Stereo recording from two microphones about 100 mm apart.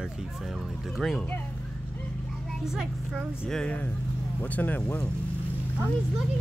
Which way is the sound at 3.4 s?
5° left (ahead or behind).